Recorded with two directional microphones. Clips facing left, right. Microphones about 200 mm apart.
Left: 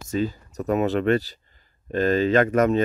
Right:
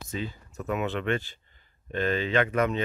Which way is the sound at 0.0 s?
45° left (ahead or behind).